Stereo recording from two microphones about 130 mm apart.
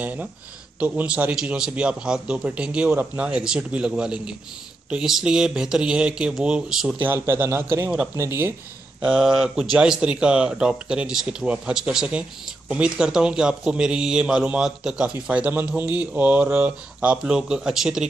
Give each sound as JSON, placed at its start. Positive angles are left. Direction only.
{"t": 0.0, "sound": "speech", "side_deg": -10}
{"t": 9.0, "sound": "speech", "side_deg": -5}